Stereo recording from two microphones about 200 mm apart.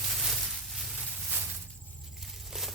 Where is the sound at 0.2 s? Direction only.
Centre (ahead or behind).